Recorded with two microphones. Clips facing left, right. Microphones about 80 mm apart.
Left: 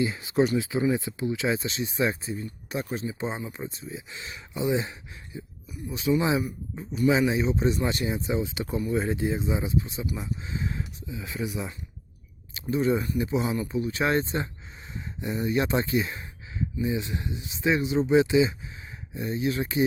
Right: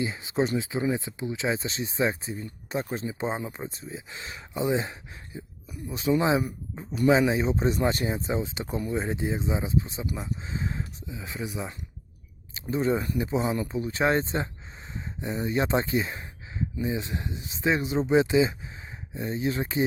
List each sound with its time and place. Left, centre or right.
0.0 s speech: right
2.0 s speech: right
8.9 s speech: right
9.8 s speech: right
11.1 s speech: right